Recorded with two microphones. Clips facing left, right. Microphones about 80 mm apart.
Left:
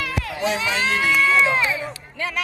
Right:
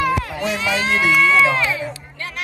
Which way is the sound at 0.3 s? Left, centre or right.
Left.